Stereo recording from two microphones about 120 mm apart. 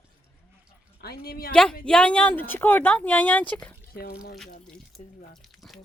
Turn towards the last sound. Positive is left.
turn(degrees=0)  # may be behind; listen again after turning